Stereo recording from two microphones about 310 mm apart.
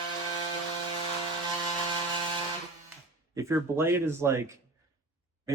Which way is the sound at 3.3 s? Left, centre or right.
Centre.